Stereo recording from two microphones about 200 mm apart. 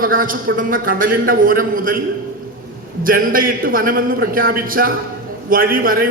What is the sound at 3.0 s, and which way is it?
A man's voice, 45° right (ahead or behind).